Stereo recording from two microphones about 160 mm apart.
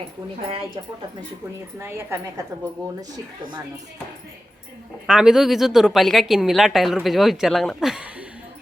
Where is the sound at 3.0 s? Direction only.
25° right (ahead or behind).